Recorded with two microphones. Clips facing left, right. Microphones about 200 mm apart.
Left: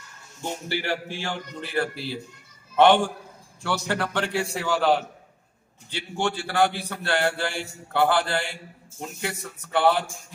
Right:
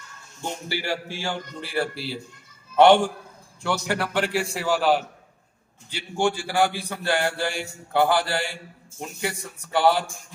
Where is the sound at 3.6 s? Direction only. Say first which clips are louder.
Right 1 dB; 10° right (ahead or behind).